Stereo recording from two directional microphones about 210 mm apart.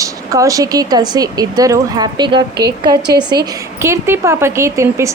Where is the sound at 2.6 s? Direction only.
50° right (ahead or behind).